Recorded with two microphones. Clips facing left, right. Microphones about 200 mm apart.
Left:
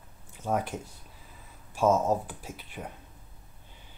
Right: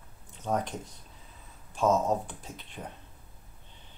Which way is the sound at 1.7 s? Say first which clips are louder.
Left 1 dB; 5° left (ahead or behind).